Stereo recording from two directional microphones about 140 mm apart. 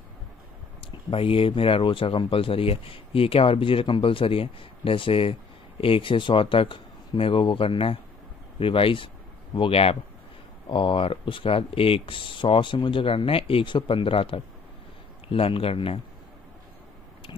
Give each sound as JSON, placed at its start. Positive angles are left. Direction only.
{"t": 1.1, "sound": "speech", "side_deg": 40}